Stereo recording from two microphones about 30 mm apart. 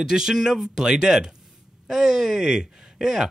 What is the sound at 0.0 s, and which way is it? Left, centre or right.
Speech, centre.